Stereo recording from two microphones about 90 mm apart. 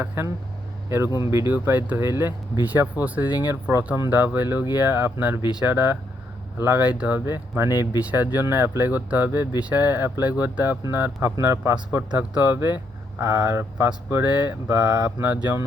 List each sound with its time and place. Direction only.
0.0 s speech: 25° right (ahead or behind)
1.5 s speech: 20° right (ahead or behind)
3.4 s speech: 30° right (ahead or behind)
4.1 s speech: 20° right (ahead or behind)
7.7 s speech: 45° left (ahead or behind)
8.1 s speech: 20° right (ahead or behind)
13.2 s speech: 35° right (ahead or behind)
15.2 s speech: 25° right (ahead or behind)